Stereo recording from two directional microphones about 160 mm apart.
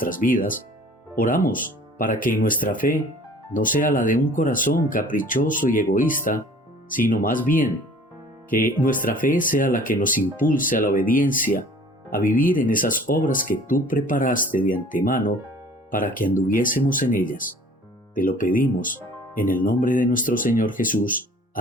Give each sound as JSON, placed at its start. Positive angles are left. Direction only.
{"t": 0.0, "sound": "speech", "side_deg": 60}